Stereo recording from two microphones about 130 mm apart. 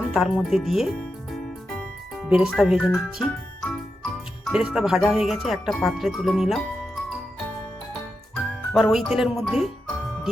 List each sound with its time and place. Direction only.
0.1 s speech: centre (ahead or behind)
2.6 s speech: centre (ahead or behind)
8.4 s speech: centre (ahead or behind)